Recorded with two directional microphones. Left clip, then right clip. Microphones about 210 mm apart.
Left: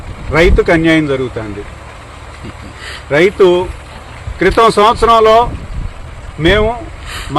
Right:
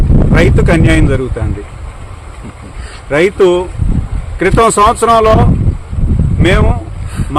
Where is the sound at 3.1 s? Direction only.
25° right (ahead or behind).